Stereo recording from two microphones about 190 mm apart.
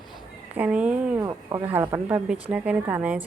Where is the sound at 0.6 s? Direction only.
5° right (ahead or behind).